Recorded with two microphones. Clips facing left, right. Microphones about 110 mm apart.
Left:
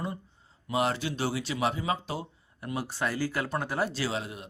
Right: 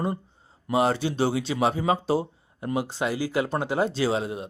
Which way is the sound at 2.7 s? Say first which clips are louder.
Right 4 dB; 20° right (ahead or behind).